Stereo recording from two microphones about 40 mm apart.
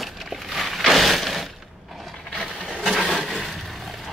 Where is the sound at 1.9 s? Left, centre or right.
Centre.